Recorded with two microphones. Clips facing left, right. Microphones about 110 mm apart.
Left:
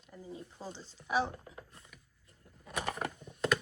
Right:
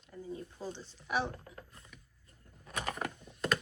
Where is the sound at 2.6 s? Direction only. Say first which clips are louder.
Left 1 dB; 5° left (ahead or behind).